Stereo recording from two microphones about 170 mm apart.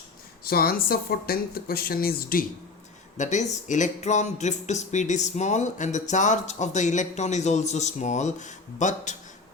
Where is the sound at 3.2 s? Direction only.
45° left (ahead or behind).